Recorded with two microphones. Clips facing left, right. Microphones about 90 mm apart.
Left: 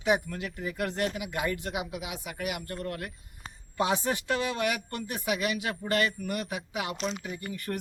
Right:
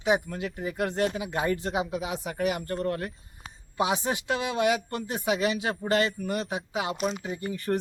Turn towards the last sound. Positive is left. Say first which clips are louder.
# right 6 dB
turn(degrees=-25)  # may be behind; listen again after turning